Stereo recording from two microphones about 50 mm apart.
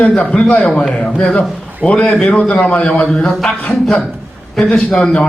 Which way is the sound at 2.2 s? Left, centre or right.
Left.